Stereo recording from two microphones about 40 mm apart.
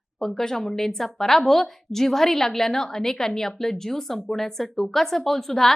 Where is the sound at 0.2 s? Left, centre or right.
Centre.